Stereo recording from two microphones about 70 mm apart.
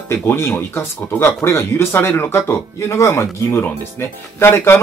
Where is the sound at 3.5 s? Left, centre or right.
Left.